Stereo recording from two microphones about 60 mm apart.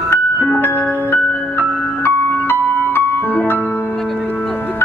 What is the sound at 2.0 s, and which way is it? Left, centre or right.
Music, left.